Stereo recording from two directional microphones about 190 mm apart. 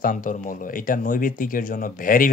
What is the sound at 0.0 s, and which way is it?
Speech, 40° left (ahead or behind).